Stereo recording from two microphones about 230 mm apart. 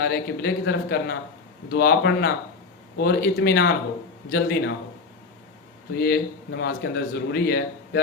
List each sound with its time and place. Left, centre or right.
0.0 s speech: left
6.0 s speech: left